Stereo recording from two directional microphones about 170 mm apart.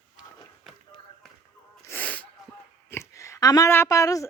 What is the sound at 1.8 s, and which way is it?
Sneeze, 10° left (ahead or behind).